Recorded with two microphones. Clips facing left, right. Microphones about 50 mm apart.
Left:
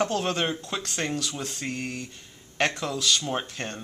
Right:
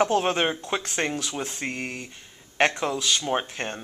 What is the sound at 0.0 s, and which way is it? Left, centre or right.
Speech, right.